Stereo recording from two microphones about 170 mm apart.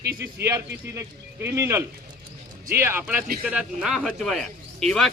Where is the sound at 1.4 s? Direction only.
15° right (ahead or behind).